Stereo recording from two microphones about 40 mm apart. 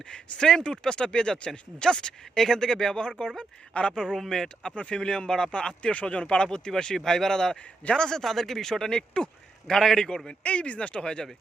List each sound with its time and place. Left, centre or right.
0.1 s speech: centre
8.2 s speech: centre
10.2 s speech: left